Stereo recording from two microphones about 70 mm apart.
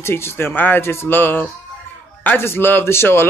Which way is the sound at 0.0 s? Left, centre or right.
Left.